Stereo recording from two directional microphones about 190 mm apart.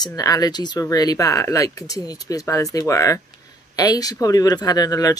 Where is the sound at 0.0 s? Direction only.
20° left (ahead or behind).